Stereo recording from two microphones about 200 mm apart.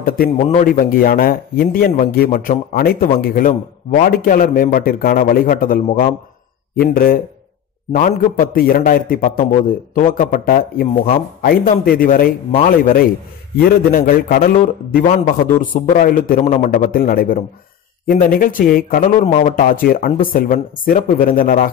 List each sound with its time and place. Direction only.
0.5 s speech: 40° left (ahead or behind)